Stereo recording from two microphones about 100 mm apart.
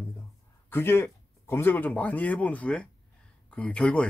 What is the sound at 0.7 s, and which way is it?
Speech, 20° left (ahead or behind).